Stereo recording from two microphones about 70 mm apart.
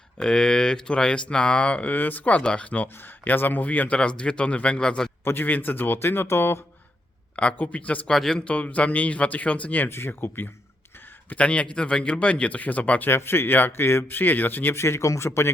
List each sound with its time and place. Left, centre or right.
0.2 s speech: centre
5.2 s speech: left
7.3 s speech: centre
8.1 s a man's voice: centre
8.4 s speech: centre
9.9 s speech: left
11.3 s speech: centre
13.1 s speech: left
14.8 s speech: left